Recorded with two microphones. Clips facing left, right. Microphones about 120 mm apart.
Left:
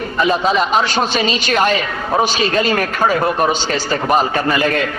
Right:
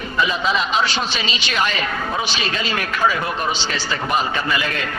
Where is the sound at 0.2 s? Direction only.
45° left (ahead or behind).